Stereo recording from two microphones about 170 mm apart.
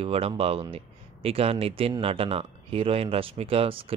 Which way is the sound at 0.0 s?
35° right (ahead or behind).